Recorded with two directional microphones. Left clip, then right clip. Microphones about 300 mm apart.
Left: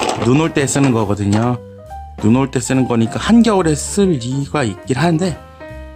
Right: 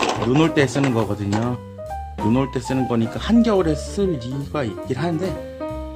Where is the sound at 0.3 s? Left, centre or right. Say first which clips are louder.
Left 2 dB; left.